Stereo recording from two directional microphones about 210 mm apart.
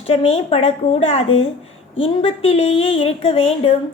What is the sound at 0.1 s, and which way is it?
Speech, 30° left (ahead or behind).